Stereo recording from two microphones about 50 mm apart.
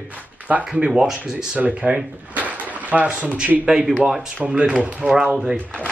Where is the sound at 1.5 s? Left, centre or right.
Right.